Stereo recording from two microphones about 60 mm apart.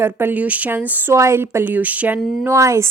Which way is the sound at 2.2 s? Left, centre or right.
Centre.